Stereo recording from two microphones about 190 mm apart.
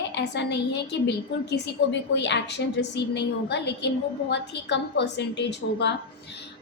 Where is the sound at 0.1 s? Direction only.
65° left (ahead or behind).